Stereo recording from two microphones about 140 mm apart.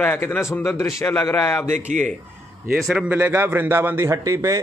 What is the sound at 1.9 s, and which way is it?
Speech, 60° right (ahead or behind).